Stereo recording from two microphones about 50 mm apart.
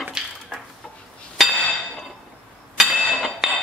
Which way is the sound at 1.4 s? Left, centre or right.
Centre.